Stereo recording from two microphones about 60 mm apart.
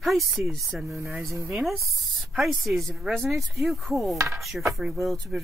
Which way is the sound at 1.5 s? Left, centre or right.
Centre.